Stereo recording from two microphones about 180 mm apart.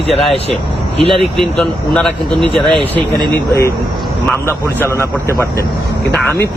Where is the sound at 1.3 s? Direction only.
5° left (ahead or behind).